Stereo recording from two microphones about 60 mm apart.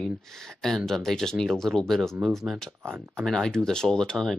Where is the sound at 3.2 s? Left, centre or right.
Centre.